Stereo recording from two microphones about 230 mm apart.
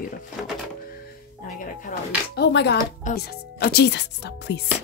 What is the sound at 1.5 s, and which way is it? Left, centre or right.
Speech, left.